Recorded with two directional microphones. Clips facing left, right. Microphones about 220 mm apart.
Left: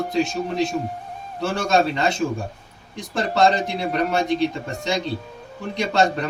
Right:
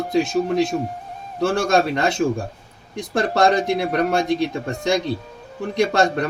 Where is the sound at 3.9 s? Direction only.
55° right (ahead or behind).